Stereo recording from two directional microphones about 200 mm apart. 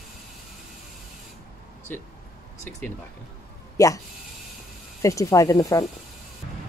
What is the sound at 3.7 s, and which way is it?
Speech, 15° left (ahead or behind).